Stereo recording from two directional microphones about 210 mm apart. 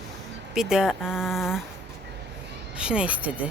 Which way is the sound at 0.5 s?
Centre (ahead or behind).